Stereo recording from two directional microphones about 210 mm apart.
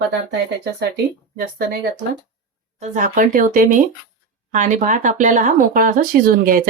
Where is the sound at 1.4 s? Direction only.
45° right (ahead or behind).